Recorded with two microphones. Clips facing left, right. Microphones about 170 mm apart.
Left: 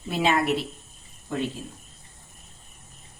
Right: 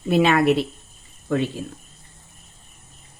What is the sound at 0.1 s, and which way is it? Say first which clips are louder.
Speech: right 6 dB; 65° right (ahead or behind).